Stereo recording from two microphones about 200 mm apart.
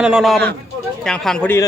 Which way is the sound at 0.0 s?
5° right (ahead or behind).